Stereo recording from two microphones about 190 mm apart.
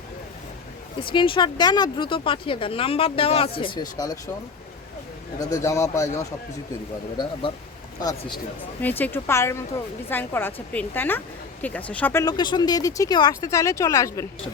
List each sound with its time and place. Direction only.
1.0 s speech: 25° left (ahead or behind)
5.4 s a woman's voice: 15° left (ahead or behind)
7.5 s speech: 30° left (ahead or behind)
8.8 s a woman's voice: 10° left (ahead or behind)
12.2 s speech: 25° left (ahead or behind)